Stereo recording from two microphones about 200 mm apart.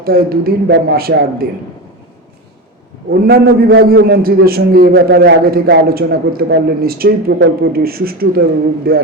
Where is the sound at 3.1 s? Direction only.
50° right (ahead or behind).